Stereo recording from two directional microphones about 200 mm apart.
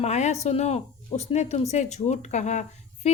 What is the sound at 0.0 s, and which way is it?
Speech, 35° left (ahead or behind).